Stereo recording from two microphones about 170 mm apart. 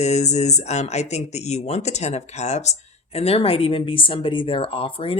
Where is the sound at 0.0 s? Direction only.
40° left (ahead or behind).